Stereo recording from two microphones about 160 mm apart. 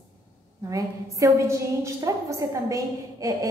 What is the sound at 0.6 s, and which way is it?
A woman's voice, 20° right (ahead or behind).